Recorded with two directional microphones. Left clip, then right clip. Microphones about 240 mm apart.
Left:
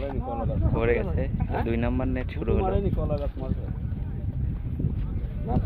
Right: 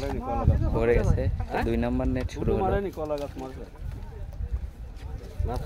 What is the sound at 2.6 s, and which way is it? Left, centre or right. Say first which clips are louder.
Speech: right 1 dB; left.